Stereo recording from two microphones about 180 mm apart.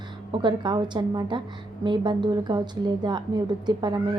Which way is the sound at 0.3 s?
25° right (ahead or behind).